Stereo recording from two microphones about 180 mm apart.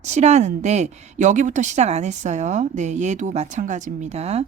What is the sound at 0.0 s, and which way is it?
A woman's voice, 40° right (ahead or behind).